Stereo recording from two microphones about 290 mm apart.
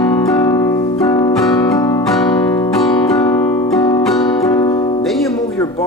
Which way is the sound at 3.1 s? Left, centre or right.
Centre.